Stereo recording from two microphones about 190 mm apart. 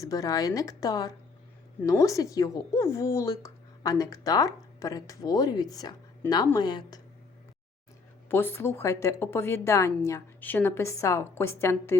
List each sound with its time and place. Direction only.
0.0 s a woman's voice: 20° left (ahead or behind)
8.3 s a woman's voice: 10° left (ahead or behind)